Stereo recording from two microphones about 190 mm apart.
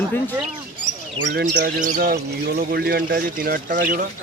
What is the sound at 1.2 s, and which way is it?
Speech, 70° right (ahead or behind).